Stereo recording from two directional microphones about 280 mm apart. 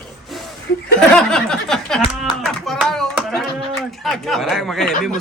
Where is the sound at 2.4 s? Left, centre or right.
Centre.